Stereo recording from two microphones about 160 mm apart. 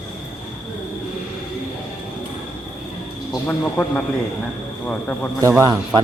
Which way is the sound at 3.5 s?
10° left (ahead or behind).